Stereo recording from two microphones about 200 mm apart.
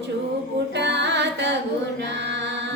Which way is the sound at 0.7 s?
60° right (ahead or behind).